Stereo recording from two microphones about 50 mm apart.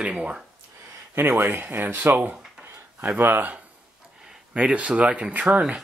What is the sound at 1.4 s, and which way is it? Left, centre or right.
Speech, right.